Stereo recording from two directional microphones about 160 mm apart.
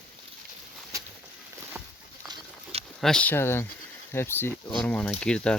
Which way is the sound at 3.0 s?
5° left (ahead or behind).